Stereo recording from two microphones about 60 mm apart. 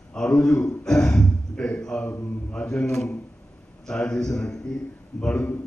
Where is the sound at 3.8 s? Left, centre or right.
Centre.